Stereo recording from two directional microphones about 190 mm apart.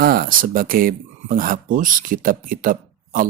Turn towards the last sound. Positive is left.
turn(degrees=-45)  # may be behind; listen again after turning